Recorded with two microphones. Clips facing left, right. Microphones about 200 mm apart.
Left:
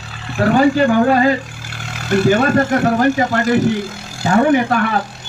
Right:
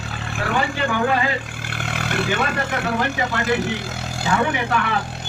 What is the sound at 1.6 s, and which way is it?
Vehicle, 55° right (ahead or behind).